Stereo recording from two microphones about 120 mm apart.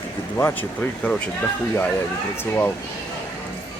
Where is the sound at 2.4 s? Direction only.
15° left (ahead or behind).